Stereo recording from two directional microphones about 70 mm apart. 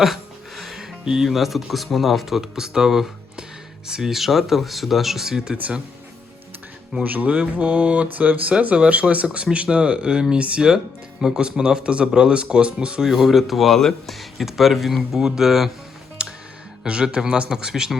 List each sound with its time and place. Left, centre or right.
0.0 s speech: centre
5.5 s speech: centre
7.0 s speech: right
13.1 s speech: centre
16.8 s speech: centre